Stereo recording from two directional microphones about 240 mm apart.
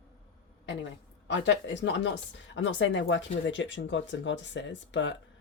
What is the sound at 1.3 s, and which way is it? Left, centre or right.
Speech, left.